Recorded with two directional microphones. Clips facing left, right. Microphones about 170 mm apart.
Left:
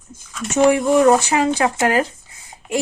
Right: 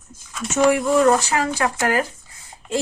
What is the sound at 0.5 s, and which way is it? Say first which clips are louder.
A woman's voice: left 3 dB; 20° left (ahead or behind).